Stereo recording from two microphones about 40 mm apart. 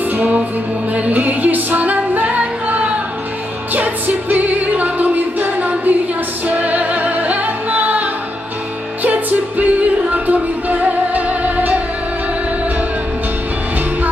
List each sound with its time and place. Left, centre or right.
0.1 s music: right
3.7 s music: right